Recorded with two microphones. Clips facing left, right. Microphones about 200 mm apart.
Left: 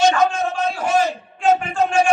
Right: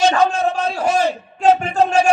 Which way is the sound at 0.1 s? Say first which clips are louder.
Right 2 dB; 35° right (ahead or behind).